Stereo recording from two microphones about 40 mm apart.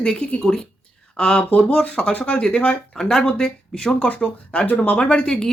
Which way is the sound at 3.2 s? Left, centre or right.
Left.